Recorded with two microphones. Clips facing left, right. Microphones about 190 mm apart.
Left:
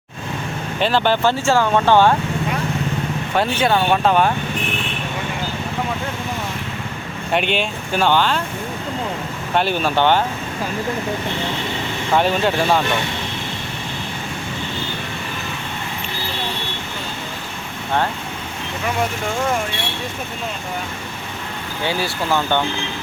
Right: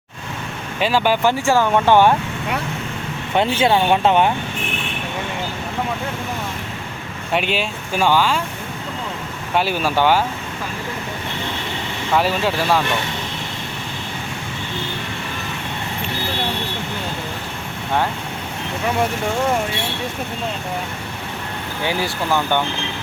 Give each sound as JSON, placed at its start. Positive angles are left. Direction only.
{"t": 0.8, "sound": "speech", "side_deg": -10}
{"t": 3.3, "sound": "speech", "side_deg": -20}
{"t": 7.3, "sound": "speech", "side_deg": -5}
{"t": 9.6, "sound": "speech", "side_deg": -5}
{"t": 12.1, "sound": "speech", "side_deg": -5}